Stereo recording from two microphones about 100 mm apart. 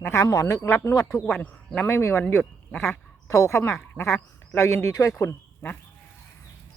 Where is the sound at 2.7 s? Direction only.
10° left (ahead or behind).